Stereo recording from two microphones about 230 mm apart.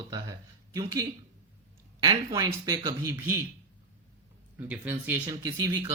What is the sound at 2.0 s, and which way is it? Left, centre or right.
Speech, centre.